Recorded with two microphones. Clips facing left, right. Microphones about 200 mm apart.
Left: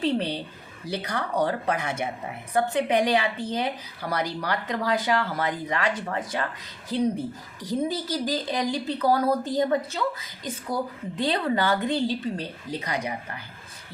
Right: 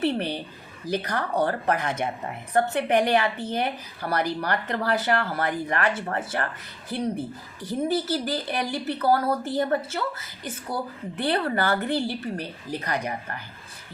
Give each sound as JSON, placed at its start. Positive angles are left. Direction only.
{"t": 0.0, "sound": "a woman's voice", "side_deg": 15}
{"t": 11.2, "sound": "speech", "side_deg": 15}